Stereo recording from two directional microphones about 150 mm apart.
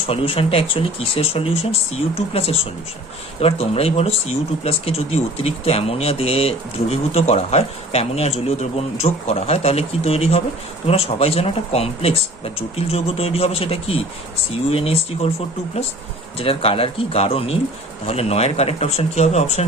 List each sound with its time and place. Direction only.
0.1 s speech: 40° left (ahead or behind)